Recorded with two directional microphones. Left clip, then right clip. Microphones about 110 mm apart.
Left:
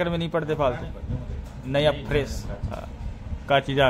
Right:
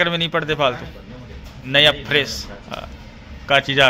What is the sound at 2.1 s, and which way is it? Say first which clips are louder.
A man's voice: right 7 dB; 10° left (ahead or behind).